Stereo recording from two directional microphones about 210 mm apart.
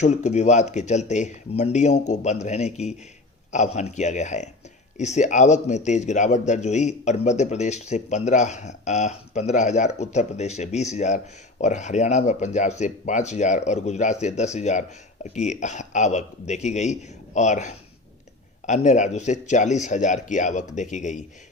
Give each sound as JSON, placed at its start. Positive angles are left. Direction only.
{"t": 0.0, "sound": "speech", "side_deg": 35}